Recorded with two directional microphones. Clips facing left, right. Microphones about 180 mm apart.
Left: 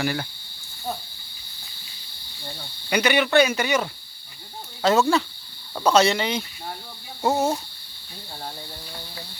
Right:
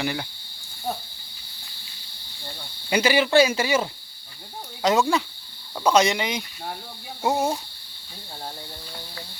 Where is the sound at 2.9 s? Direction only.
25° right (ahead or behind).